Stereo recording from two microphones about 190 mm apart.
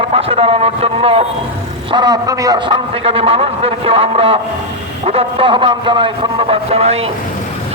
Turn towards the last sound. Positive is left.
turn(degrees=-30)  # may be behind; listen again after turning